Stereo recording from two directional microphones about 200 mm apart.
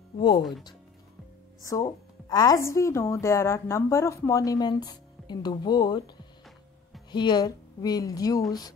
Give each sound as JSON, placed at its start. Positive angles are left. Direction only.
{"t": 0.4, "sound": "speech", "side_deg": 0}
{"t": 1.6, "sound": "a woman's voice", "side_deg": 15}
{"t": 7.1, "sound": "speech", "side_deg": 20}